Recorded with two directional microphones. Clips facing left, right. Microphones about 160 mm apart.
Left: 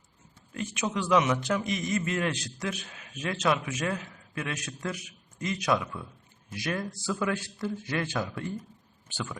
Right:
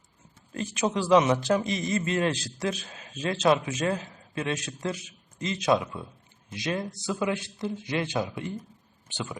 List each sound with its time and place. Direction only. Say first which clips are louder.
0.5 s a man's voice: right 4 dB; 35° right (ahead or behind); by 8.5 s 20° right (ahead or behind)